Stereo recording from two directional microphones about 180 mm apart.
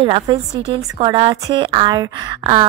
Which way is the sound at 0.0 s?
30° right (ahead or behind).